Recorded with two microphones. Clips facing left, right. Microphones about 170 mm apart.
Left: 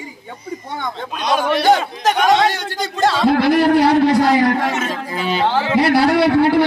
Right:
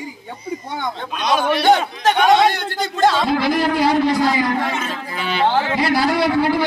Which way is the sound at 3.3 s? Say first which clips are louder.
Left 5 dB; 60° left (ahead or behind).